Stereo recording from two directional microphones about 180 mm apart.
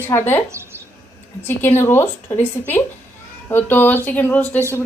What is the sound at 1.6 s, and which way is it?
A woman's voice, 10° left (ahead or behind).